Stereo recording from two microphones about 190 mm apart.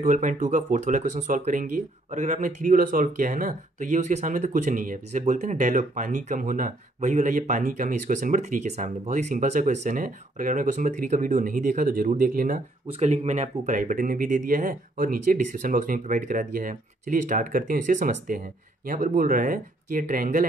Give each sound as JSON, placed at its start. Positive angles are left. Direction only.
{"t": 0.0, "sound": "speech", "side_deg": -40}
{"t": 12.8, "sound": "speech", "side_deg": -35}